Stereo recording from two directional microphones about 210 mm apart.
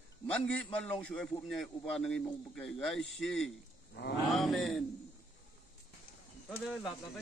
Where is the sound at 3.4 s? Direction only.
50° left (ahead or behind).